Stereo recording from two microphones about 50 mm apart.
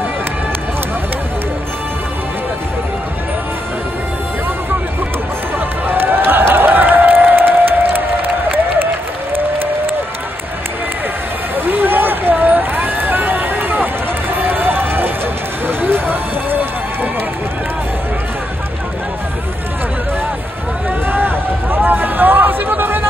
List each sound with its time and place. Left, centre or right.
5.9 s a sound: right
9.3 s applause: right
11.5 s run: right
14.3 s music: right
15.6 s run: right
21.1 s hubbub: right